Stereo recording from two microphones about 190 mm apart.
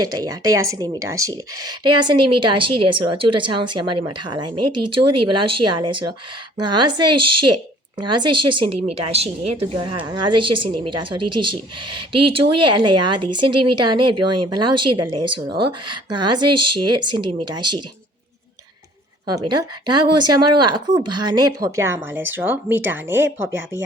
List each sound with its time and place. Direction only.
0.0 s a woman's voice: 20° right (ahead or behind)
19.3 s speech: 20° right (ahead or behind)